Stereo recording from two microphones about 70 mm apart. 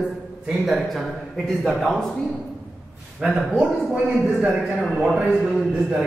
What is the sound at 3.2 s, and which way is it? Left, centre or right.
Speech, centre.